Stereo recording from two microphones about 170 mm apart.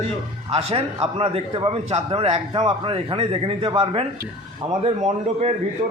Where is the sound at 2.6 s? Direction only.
25° right (ahead or behind).